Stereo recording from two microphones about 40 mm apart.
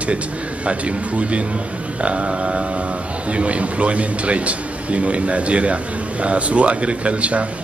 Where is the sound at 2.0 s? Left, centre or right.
Right.